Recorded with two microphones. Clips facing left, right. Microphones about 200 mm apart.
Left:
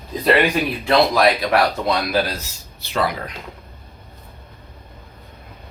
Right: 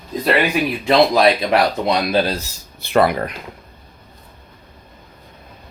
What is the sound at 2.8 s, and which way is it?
Speech, 55° right (ahead or behind).